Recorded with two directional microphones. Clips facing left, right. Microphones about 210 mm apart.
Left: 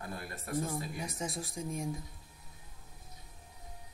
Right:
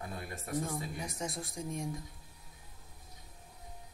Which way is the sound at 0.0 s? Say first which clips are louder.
Even; 20° right (ahead or behind).